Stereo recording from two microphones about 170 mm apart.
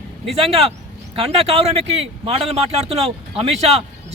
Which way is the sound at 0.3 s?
35° right (ahead or behind).